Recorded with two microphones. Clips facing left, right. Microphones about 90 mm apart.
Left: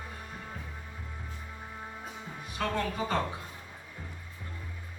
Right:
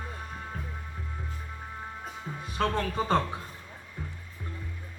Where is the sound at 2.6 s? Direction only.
40° right (ahead or behind).